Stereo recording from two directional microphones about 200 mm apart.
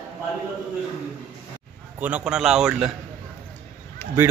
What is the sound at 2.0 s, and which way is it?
Speech, 5° right (ahead or behind).